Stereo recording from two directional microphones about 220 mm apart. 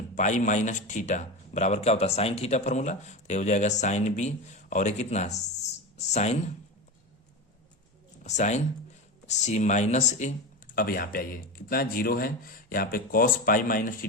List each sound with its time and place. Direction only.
0.2 s speech: 35° left (ahead or behind)
8.2 s speech: 30° left (ahead or behind)